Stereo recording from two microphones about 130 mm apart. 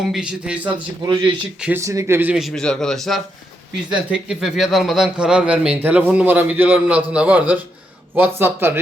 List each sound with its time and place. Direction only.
0.1 s speech: 5° right (ahead or behind)
1.0 s speech: 35° right (ahead or behind)
1.8 s speech: 25° right (ahead or behind)
2.3 s a man's voice: centre (ahead or behind); by 8.8 s 15° right (ahead or behind)